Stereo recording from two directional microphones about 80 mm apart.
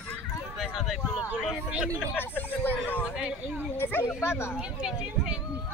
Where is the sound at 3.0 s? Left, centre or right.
Centre.